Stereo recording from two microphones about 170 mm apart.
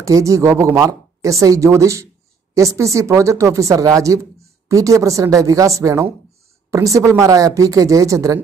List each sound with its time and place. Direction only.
0.0 s a woman's voice: 20° right (ahead or behind)